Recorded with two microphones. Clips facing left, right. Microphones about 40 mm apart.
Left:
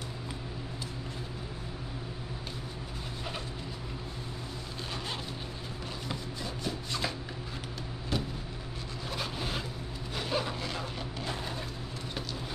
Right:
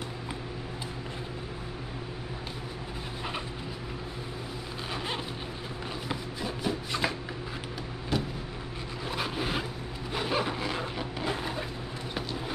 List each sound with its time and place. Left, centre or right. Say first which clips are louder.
4.9 s vehicle: right 4 dB; centre
6.0 s a sound: right 4 dB; centre
8.1 s vehicle: right 3 dB; centre
9.1 s vehicle: right 4 dB; centre